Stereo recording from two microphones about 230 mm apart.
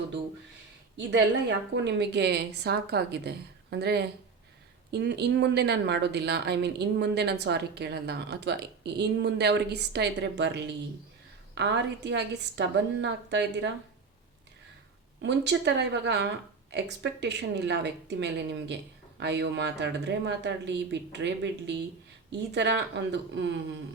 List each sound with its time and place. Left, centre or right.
0.9 s speech: right
15.2 s speech: right